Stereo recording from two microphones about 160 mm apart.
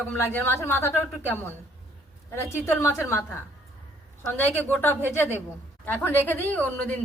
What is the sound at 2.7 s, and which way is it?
Speech, 20° left (ahead or behind).